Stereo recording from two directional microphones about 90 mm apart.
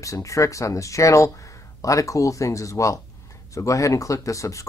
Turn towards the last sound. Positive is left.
turn(degrees=35)  # may be behind; listen again after turning